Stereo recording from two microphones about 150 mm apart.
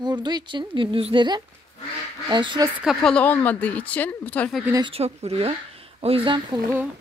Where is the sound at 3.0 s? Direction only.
10° left (ahead or behind).